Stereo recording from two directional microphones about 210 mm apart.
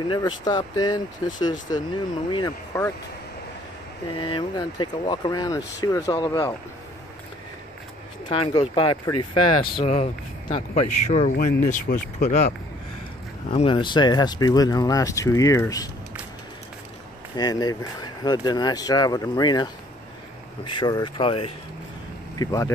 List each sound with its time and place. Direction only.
0.1 s speech: 20° left (ahead or behind)
4.2 s speech: 20° left (ahead or behind)
8.3 s speech: 25° left (ahead or behind); by 12.5 s 45° left (ahead or behind)
13.5 s speech: 25° left (ahead or behind)
17.4 s speech: 20° left (ahead or behind)
22.4 s speech: 15° left (ahead or behind)